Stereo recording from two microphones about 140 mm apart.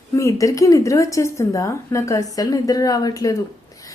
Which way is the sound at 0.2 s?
20° left (ahead or behind).